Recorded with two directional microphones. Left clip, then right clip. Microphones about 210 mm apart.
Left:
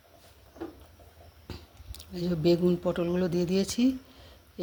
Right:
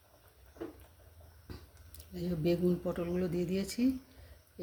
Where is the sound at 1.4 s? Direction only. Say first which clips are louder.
Left 7 dB; 15° left (ahead or behind).